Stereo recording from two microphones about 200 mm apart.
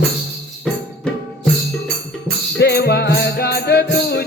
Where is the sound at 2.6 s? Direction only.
55° left (ahead or behind).